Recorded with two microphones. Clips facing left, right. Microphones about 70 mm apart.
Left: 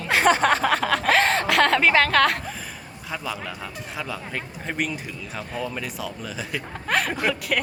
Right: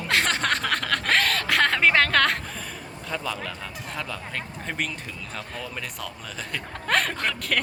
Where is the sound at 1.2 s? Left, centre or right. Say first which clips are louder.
Left 4 dB; left.